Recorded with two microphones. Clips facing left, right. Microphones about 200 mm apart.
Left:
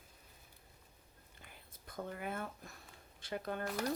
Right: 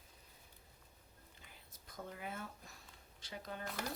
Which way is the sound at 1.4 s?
55° left (ahead or behind).